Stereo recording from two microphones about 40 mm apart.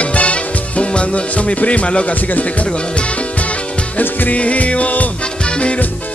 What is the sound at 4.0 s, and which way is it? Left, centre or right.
Speech, left.